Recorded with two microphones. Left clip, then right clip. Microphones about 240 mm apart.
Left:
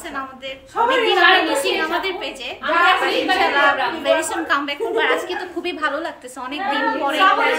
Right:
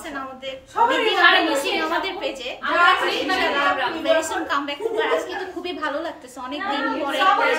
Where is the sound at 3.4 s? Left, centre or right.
Centre.